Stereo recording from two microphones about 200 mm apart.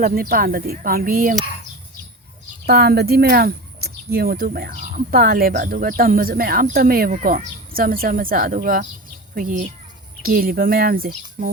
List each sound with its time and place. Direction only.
0.0 s speech: 50° right (ahead or behind)
2.6 s speech: 50° right (ahead or behind)